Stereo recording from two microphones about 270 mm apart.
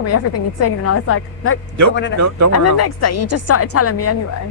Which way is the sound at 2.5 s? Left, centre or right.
Left.